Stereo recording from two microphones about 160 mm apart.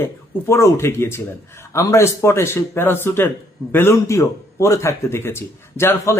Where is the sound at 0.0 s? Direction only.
15° left (ahead or behind).